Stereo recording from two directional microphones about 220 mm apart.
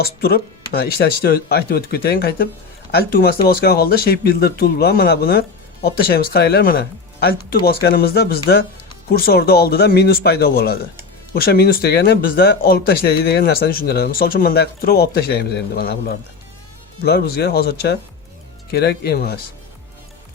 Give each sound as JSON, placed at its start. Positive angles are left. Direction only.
{"t": 0.0, "sound": "speech", "side_deg": 45}